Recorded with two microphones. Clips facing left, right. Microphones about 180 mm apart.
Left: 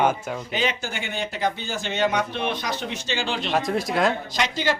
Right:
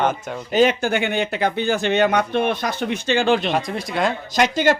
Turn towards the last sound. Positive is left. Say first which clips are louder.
# right 7 dB
turn(degrees=-50)  # may be behind; listen again after turning